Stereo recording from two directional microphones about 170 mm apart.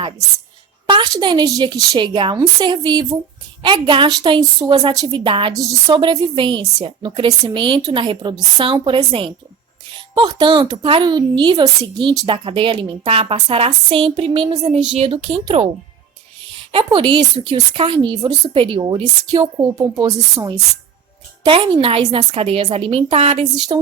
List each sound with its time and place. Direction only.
0.9 s a child's voice: 25° right (ahead or behind)
16.7 s a child's voice: 30° right (ahead or behind)